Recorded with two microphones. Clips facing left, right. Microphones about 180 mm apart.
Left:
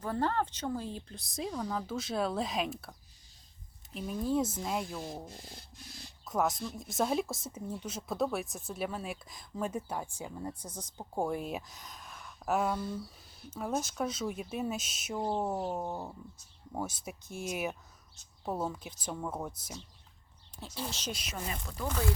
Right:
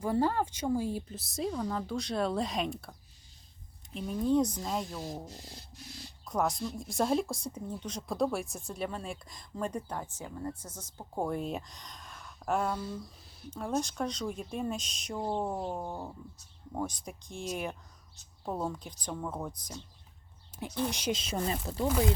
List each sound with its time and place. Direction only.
0.0 s speech: 10° right (ahead or behind)
3.9 s speech: 5° left (ahead or behind)
6.2 s speech: centre (ahead or behind)
20.6 s speech: 15° right (ahead or behind)
21.3 s speech: 30° right (ahead or behind)